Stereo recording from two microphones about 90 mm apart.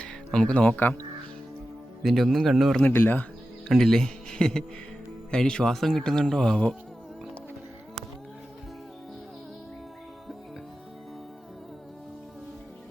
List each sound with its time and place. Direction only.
0.0 s speech: 10° left (ahead or behind)
2.0 s speech: centre (ahead or behind)
2.8 s speech: 20° left (ahead or behind)
3.7 s speech: 5° left (ahead or behind)